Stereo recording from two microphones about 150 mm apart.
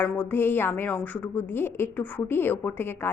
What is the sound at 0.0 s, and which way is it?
A woman's voice, 10° left (ahead or behind).